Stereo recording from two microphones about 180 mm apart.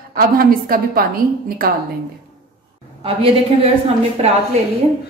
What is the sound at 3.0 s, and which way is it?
Speech, 30° right (ahead or behind).